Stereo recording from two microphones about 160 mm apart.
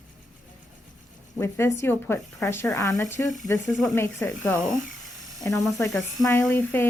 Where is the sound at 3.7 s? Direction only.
Centre (ahead or behind).